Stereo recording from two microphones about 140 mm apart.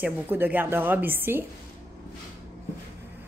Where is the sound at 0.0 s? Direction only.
15° right (ahead or behind).